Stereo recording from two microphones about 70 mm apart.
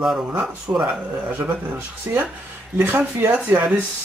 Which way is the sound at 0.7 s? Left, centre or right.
Right.